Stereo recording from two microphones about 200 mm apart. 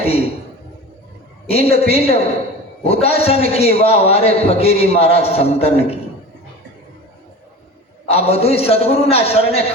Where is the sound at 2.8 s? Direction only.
30° left (ahead or behind).